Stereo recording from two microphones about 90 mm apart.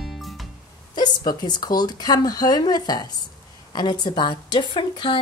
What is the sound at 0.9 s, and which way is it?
Speech, 55° left (ahead or behind).